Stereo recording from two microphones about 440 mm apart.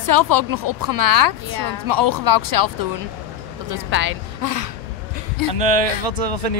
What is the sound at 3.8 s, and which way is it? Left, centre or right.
Speech, right.